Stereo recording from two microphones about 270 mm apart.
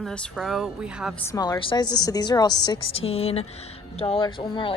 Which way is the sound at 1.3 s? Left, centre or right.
Centre.